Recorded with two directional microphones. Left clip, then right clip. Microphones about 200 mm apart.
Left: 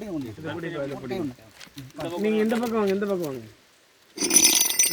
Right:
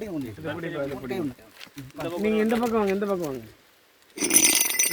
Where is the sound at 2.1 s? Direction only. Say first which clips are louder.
Even; centre (ahead or behind).